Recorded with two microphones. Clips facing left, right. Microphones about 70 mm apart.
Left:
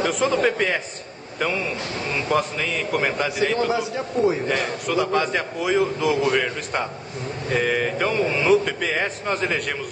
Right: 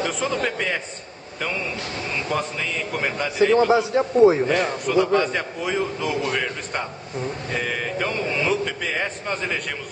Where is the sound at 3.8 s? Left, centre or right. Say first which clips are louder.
Right 6 dB; right.